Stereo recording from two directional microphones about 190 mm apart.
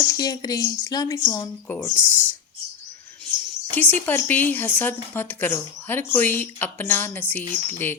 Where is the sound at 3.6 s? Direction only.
10° left (ahead or behind).